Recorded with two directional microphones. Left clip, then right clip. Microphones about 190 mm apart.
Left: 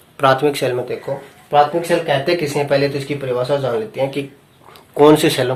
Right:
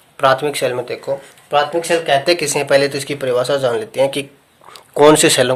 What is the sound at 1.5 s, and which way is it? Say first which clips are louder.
Speech: left 1 dB; 45° right (ahead or behind).